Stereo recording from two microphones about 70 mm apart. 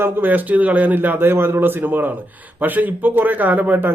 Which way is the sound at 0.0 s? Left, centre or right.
Right.